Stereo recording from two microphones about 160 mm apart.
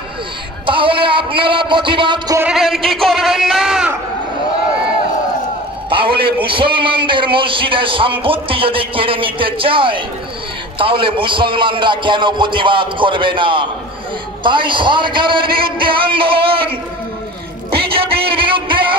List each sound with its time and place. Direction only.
0.7 s speech: 30° right (ahead or behind)
2.3 s speech: 5° right (ahead or behind)
5.9 s a sound: 30° right (ahead or behind)
6.4 s a man's voice: 30° right (ahead or behind)
17.6 s music: 35° right (ahead or behind)